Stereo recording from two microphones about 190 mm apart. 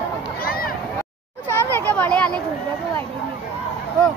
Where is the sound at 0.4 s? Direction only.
50° left (ahead or behind).